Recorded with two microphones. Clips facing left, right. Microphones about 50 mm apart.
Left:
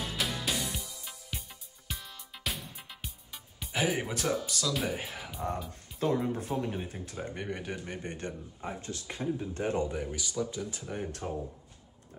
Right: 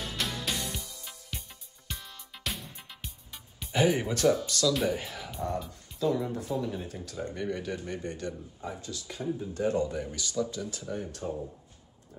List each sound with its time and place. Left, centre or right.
0.0 s music: centre
4.0 s speech: centre
4.9 s speech: centre
5.9 s speech: left
6.9 s speech: left
11.1 s speech: left